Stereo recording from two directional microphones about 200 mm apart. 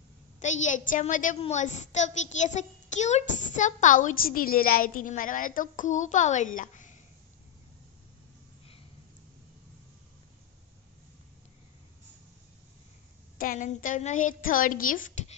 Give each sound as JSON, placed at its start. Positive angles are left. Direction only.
{"t": 0.4, "sound": "a woman's voice", "side_deg": 35}
{"t": 13.4, "sound": "a woman's voice", "side_deg": 40}